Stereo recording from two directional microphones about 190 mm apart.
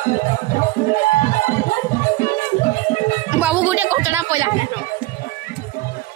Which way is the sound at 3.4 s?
10° right (ahead or behind).